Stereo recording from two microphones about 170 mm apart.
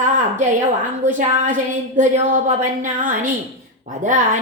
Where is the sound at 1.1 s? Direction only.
50° right (ahead or behind).